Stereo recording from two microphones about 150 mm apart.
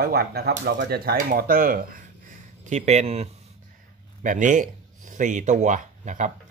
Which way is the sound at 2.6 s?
50° right (ahead or behind).